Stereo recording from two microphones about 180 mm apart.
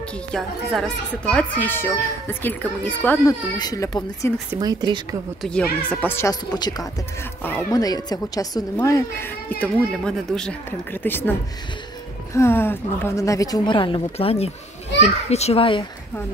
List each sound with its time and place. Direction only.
0.3 s speech: centre (ahead or behind)
3.5 s a woman's voice: 20° left (ahead or behind)
4.6 s speech: 25° right (ahead or behind)
5.4 s a woman's voice: 5° left (ahead or behind)
12.4 s a woman's voice: 15° left (ahead or behind); by 15.8 s 30° left (ahead or behind)